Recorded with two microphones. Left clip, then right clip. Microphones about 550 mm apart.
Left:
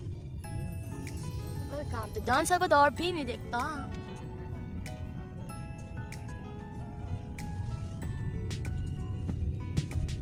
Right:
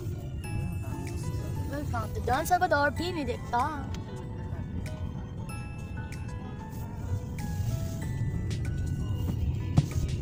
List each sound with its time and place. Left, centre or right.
2.2 s speech: left
9.8 s music: centre